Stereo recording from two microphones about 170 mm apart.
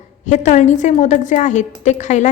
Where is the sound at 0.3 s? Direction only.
45° left (ahead or behind).